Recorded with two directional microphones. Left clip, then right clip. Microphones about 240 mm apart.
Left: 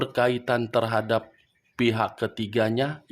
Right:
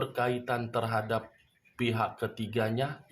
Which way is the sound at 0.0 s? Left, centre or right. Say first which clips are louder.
Left 7 dB; left.